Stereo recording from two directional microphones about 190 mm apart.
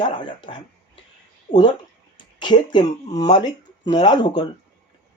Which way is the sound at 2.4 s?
25° left (ahead or behind).